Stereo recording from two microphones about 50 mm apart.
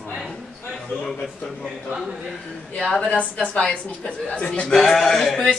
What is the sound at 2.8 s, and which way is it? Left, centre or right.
A woman's voice, centre.